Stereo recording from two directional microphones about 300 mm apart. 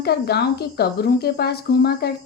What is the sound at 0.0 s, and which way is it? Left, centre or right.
A woman's voice, left.